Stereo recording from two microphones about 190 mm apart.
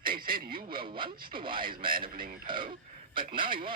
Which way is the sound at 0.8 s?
25° right (ahead or behind).